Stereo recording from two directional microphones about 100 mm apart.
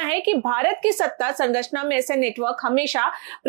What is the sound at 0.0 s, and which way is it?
Speech, 15° right (ahead or behind).